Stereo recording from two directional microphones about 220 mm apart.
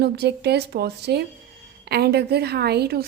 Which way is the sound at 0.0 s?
50° right (ahead or behind).